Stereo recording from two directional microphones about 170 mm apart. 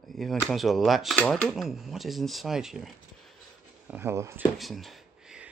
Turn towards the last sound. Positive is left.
turn(degrees=0)  # may be behind; listen again after turning